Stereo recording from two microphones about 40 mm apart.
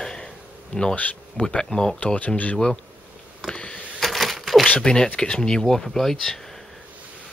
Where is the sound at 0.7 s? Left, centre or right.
Left.